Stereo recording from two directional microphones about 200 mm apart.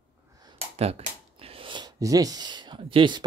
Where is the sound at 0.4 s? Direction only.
25° right (ahead or behind).